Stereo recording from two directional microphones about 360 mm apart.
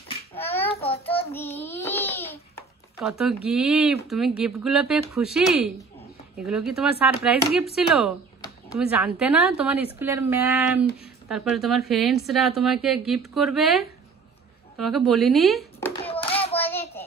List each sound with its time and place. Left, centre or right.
0.3 s child singing: centre
0.7 s child singing: centre
1.1 s child singing: centre
2.5 s a sound: centre
3.5 s speech: centre
15.9 s hands: centre